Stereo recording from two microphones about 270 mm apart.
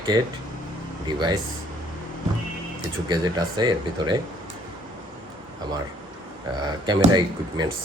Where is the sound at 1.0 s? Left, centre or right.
Centre.